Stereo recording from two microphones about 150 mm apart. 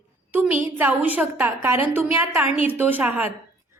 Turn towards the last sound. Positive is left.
turn(degrees=-10)  # may be behind; listen again after turning